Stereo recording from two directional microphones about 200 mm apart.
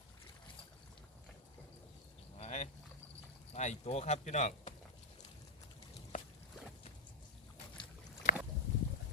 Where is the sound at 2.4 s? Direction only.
35° left (ahead or behind).